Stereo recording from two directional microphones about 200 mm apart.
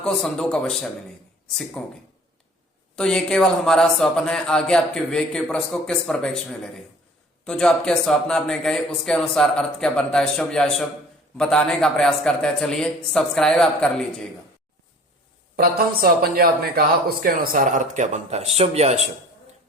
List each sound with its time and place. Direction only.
0.0 s speech: centre (ahead or behind)
15.5 s speech: 50° right (ahead or behind); by 18.9 s 30° right (ahead or behind)